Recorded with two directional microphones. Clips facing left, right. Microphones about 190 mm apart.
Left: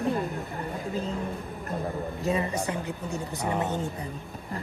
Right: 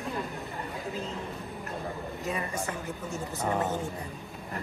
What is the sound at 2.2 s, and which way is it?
Speech, 20° left (ahead or behind).